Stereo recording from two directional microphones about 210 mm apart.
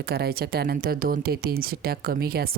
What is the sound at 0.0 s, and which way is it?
Speech, 50° right (ahead or behind).